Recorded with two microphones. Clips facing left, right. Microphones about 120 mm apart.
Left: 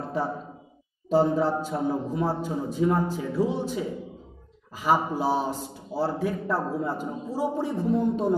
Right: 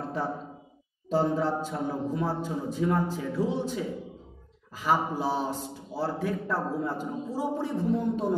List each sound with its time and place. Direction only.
1.0 s a man's voice: 10° left (ahead or behind)